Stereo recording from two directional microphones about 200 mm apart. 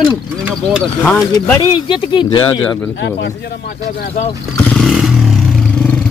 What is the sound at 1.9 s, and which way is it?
Speech, 25° left (ahead or behind).